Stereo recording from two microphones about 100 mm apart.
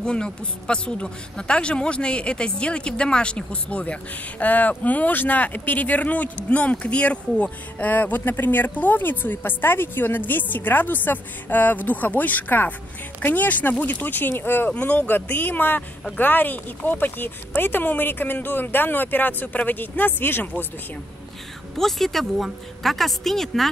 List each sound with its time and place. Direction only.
0.0 s speech: 10° left (ahead or behind)
21.7 s a woman's voice: 5° left (ahead or behind)